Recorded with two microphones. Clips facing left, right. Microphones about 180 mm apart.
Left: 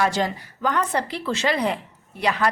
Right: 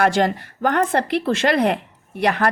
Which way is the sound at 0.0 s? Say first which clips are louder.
Right 5 dB; 60° right (ahead or behind).